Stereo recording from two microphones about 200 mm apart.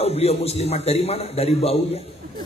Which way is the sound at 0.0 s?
30° left (ahead or behind).